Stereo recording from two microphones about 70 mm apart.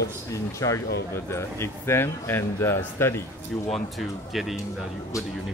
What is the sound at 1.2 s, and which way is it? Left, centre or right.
Speech, left.